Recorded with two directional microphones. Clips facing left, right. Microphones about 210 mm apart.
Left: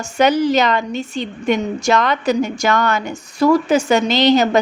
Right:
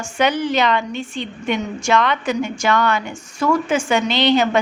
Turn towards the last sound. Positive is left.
turn(degrees=40)  # may be behind; listen again after turning